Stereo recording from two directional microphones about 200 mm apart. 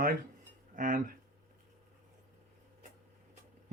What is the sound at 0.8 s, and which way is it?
Speech, 40° right (ahead or behind).